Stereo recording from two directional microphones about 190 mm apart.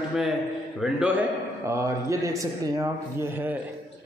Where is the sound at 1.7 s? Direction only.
15° right (ahead or behind).